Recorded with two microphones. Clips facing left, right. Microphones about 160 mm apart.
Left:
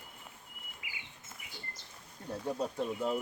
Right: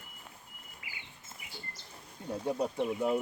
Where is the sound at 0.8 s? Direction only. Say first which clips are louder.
Even; 20° left (ahead or behind).